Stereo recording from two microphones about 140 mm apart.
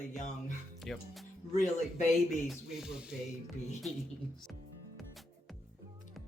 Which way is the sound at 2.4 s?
5° right (ahead or behind).